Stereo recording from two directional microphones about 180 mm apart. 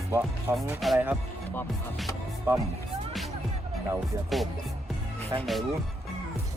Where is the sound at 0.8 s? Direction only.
5° right (ahead or behind).